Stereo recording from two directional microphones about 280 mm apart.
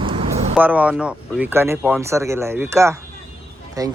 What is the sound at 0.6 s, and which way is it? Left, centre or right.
Speech, centre.